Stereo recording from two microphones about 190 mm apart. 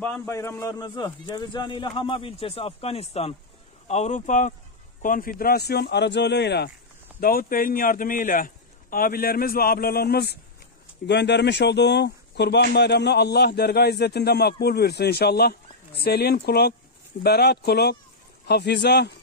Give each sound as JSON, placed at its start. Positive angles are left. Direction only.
{"t": 0.0, "sound": "speech", "side_deg": 10}
{"t": 7.2, "sound": "a man's voice", "side_deg": 50}